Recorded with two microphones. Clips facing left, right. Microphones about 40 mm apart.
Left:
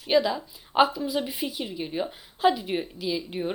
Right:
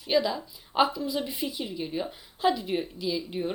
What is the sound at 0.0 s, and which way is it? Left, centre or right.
Speech, centre.